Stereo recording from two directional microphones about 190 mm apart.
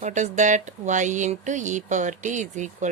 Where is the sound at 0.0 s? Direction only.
40° right (ahead or behind).